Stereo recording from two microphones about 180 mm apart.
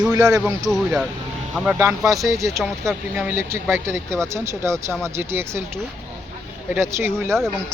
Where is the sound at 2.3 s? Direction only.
15° right (ahead or behind).